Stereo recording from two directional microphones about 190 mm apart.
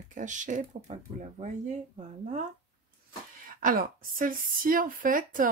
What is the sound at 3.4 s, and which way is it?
Speech, 45° right (ahead or behind).